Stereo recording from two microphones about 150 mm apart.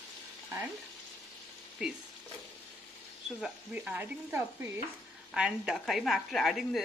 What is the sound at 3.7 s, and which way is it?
Speech, 10° right (ahead or behind).